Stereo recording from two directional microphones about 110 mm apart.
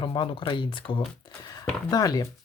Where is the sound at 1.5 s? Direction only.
35° left (ahead or behind).